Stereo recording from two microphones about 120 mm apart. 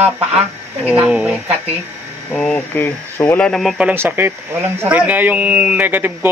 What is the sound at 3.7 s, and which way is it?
A man's voice, 15° right (ahead or behind).